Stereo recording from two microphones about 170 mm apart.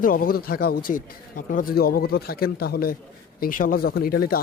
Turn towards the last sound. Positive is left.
turn(degrees=60)  # may be behind; listen again after turning